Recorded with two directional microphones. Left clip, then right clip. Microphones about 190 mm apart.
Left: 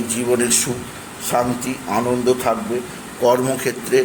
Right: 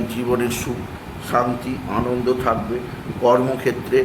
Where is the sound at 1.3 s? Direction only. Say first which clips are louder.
Even; 20° left (ahead or behind).